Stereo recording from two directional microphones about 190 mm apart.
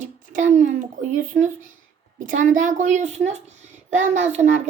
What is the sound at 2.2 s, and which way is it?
A woman's voice, 40° right (ahead or behind).